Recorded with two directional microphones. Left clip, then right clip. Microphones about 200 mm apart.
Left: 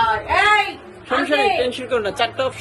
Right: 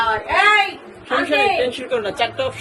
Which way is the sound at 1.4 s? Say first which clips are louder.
Right 1 dB; 20° left (ahead or behind).